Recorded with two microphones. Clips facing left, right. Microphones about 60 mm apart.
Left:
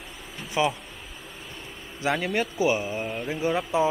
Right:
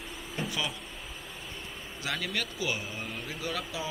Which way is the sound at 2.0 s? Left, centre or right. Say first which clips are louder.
Left 9 dB; left.